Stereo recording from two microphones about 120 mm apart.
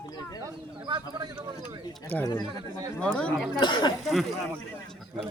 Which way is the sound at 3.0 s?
10° left (ahead or behind).